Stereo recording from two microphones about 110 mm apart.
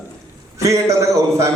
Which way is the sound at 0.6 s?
30° right (ahead or behind).